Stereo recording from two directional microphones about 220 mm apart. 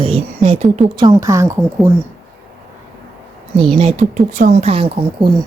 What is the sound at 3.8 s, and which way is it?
Speech, 30° right (ahead or behind).